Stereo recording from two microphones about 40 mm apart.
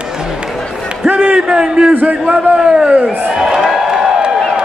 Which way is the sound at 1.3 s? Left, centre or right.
Right.